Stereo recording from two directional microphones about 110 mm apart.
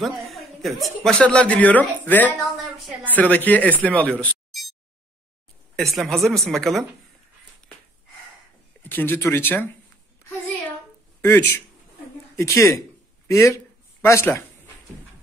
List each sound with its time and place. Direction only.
0.0 s speech: centre (ahead or behind)
5.8 s a woman's voice: 5° left (ahead or behind)
8.8 s speech: 20° left (ahead or behind)
11.1 s speech: 15° left (ahead or behind)